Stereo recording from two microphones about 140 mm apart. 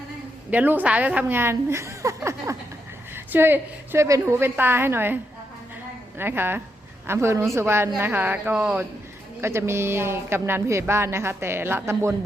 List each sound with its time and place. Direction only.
0.5 s speech: 10° right (ahead or behind)